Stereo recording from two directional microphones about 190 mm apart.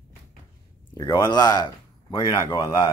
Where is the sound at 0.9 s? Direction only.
20° left (ahead or behind).